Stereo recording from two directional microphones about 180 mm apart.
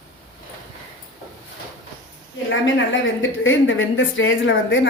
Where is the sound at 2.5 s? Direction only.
90° left.